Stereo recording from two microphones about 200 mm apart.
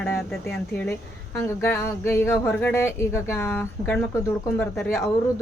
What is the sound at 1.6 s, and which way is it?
Speech, 10° left (ahead or behind).